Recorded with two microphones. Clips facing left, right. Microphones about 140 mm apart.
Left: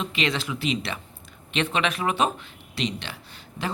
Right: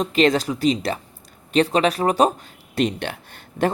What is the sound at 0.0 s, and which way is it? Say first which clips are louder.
Speech: right 9 dB; 45° right (ahead or behind).